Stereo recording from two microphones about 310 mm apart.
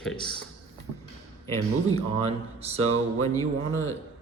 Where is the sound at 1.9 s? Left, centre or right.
Centre.